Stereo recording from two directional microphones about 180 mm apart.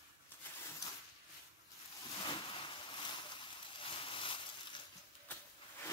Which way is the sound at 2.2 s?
30° left (ahead or behind).